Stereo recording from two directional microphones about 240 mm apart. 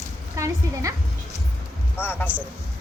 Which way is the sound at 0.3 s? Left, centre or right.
Centre.